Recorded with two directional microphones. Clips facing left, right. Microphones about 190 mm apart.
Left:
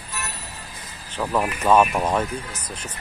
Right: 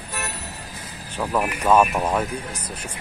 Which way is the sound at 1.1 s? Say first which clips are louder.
Even; 10° right (ahead or behind).